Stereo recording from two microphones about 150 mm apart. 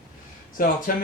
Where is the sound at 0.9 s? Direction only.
75° left (ahead or behind).